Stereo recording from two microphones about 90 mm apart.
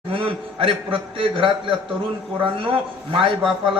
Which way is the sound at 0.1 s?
75° right (ahead or behind).